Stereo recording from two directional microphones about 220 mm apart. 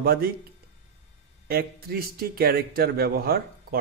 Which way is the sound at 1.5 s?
45° right (ahead or behind).